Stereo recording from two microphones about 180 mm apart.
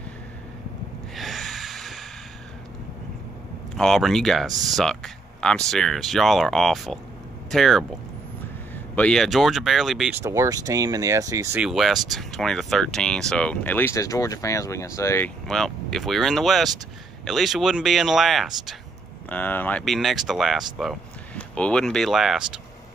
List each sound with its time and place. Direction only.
1.1 s snort: centre (ahead or behind)
3.7 s speech: centre (ahead or behind)
10.2 s speech: 15° right (ahead or behind)
11.6 s speech: centre (ahead or behind)
15.4 s speech: centre (ahead or behind)